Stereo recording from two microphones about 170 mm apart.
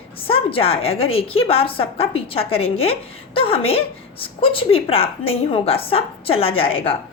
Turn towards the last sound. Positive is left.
turn(degrees=35)  # may be behind; listen again after turning